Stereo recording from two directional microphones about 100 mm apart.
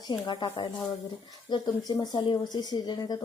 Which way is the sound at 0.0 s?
45° left (ahead or behind).